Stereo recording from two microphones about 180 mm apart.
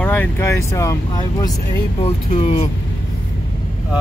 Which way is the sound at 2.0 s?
30° left (ahead or behind).